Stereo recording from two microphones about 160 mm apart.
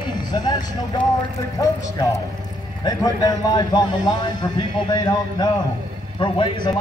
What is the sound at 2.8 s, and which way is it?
A man's voice, 25° left (ahead or behind).